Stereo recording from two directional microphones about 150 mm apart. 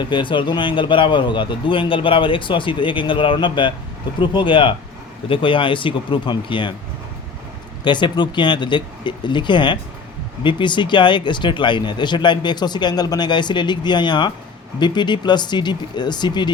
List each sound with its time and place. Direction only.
0.0 s speech: 35° left (ahead or behind)
7.9 s speech: 30° left (ahead or behind)